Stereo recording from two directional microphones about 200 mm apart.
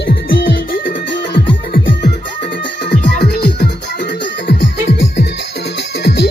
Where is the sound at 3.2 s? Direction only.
55° left (ahead or behind).